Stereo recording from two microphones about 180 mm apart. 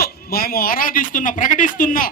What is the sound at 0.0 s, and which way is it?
A man's voice, 55° left (ahead or behind).